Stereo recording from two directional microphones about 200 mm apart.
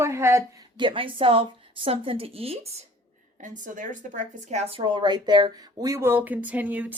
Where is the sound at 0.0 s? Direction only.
15° right (ahead or behind).